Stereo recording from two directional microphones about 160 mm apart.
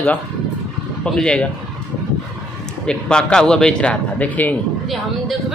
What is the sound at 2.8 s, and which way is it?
Speech, 5° left (ahead or behind).